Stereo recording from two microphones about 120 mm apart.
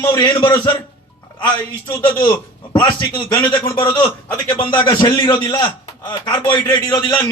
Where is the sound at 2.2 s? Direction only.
40° left (ahead or behind).